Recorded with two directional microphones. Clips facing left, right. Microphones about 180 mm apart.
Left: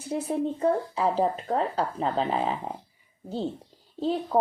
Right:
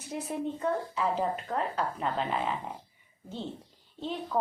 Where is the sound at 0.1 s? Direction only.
30° left (ahead or behind).